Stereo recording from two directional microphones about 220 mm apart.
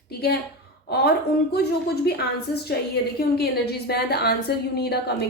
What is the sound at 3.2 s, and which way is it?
A woman's voice, 45° left (ahead or behind).